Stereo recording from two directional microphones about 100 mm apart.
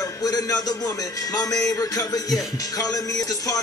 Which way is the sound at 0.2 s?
35° left (ahead or behind).